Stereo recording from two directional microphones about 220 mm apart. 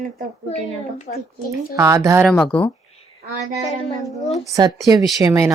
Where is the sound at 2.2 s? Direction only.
5° left (ahead or behind).